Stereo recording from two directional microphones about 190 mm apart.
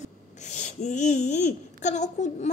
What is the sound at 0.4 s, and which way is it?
Speech, 40° left (ahead or behind).